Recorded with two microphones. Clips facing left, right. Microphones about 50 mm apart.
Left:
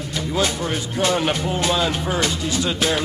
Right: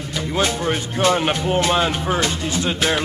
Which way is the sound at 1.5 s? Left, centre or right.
Right.